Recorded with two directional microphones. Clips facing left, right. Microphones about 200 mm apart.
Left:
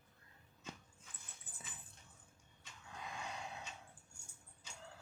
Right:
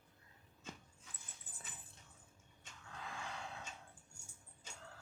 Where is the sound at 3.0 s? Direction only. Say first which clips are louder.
Left 1 dB; 20° left (ahead or behind).